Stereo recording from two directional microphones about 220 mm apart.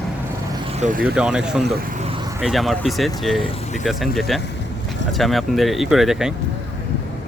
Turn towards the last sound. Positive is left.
turn(degrees=0)  # may be behind; listen again after turning